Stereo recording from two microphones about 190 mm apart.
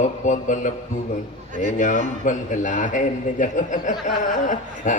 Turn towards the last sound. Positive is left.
turn(degrees=40)  # may be behind; listen again after turning